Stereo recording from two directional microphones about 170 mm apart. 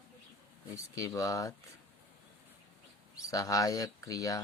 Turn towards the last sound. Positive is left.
turn(degrees=20)  # may be behind; listen again after turning